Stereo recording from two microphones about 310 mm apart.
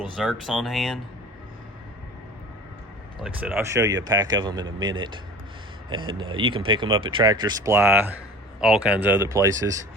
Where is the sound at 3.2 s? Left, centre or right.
Centre.